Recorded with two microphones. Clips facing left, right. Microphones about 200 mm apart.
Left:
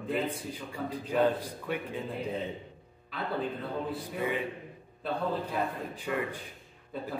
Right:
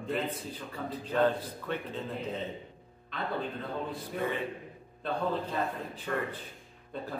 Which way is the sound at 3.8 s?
10° left (ahead or behind).